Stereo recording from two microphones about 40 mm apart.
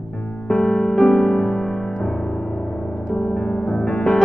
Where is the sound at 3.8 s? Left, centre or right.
Left.